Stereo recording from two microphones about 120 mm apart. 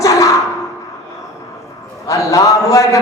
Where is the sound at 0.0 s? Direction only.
25° left (ahead or behind).